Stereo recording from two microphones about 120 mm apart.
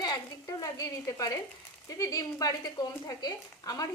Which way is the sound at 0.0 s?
30° left (ahead or behind).